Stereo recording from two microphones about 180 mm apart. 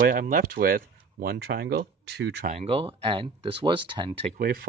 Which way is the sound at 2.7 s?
30° right (ahead or behind).